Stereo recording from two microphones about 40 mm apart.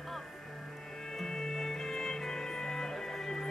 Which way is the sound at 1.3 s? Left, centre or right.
Centre.